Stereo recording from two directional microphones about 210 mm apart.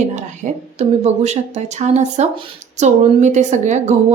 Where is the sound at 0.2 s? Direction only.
35° right (ahead or behind).